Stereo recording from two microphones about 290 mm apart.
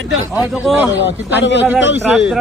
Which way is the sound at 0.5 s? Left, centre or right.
Centre.